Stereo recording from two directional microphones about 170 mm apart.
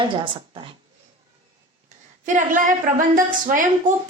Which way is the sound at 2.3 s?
50° right (ahead or behind).